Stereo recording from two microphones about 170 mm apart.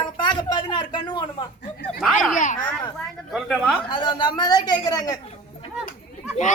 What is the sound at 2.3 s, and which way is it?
Speech, 50° left (ahead or behind).